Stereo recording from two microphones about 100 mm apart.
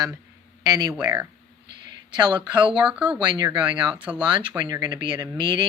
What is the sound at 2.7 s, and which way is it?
Speech, 10° right (ahead or behind).